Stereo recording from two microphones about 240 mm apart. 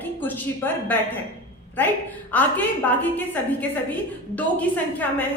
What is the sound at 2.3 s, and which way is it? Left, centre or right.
Speech, centre.